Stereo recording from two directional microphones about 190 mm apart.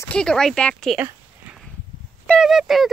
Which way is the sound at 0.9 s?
10° right (ahead or behind).